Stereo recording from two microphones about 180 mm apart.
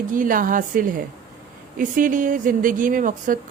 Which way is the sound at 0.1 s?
50° right (ahead or behind).